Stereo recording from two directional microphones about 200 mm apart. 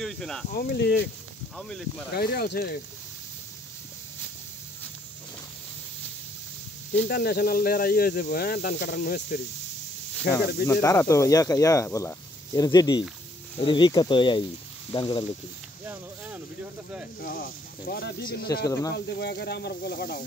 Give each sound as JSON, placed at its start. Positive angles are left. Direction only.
{"t": 0.0, "sound": "speech", "side_deg": 0}
{"t": 0.5, "sound": "speech", "side_deg": 55}
{"t": 1.6, "sound": "speech", "side_deg": 5}
{"t": 2.1, "sound": "speech", "side_deg": 50}
{"t": 6.9, "sound": "speech", "side_deg": 45}
{"t": 10.7, "sound": "speech", "side_deg": 15}
{"t": 17.2, "sound": "speech", "side_deg": 45}
{"t": 18.7, "sound": "speech", "side_deg": 15}
{"t": 18.9, "sound": "speech", "side_deg": 55}